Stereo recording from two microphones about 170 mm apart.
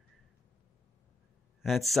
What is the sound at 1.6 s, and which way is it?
Speech, centre (ahead or behind).